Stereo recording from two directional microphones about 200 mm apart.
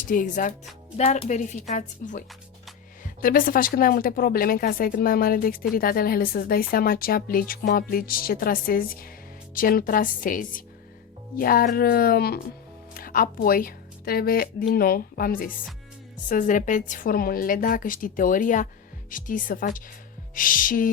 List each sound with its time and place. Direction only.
0.1 s speech: 40° left (ahead or behind)